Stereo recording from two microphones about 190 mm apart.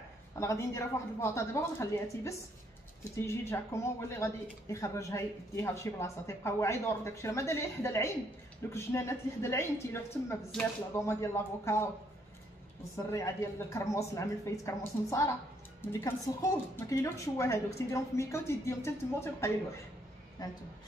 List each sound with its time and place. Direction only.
0.4 s speech: 15° left (ahead or behind)
11.0 s speech: 15° left (ahead or behind)
12.9 s a woman's voice: 15° left (ahead or behind)